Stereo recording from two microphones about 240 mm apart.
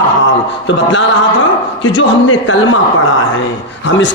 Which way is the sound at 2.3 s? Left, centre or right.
Left.